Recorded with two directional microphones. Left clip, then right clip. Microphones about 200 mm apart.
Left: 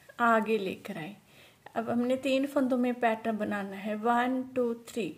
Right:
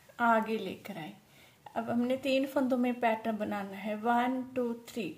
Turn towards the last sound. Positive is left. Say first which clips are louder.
# left 4 dB
turn(degrees=15)  # may be behind; listen again after turning